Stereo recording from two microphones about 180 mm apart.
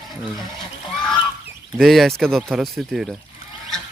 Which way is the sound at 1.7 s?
Centre (ahead or behind).